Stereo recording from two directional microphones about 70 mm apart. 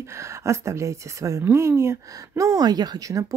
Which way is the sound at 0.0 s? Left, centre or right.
Right.